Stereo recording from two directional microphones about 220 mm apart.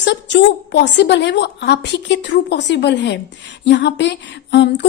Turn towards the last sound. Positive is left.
turn(degrees=50)  # may be behind; listen again after turning